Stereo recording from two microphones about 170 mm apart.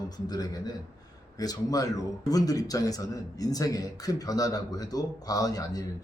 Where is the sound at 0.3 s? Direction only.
20° left (ahead or behind).